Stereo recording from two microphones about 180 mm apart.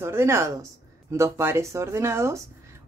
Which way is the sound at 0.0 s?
15° right (ahead or behind).